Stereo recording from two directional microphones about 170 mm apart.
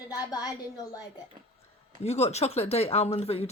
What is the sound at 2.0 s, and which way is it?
Speech, 40° left (ahead or behind).